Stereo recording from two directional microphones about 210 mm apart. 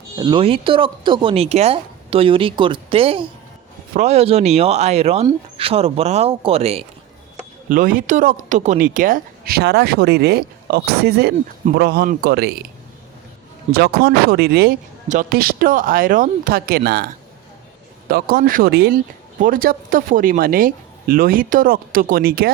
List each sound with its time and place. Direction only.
0.2 s speech: 20° right (ahead or behind)
7.7 s speech: 40° right (ahead or behind)
13.7 s speech: 45° right (ahead or behind)
18.1 s speech: 45° right (ahead or behind)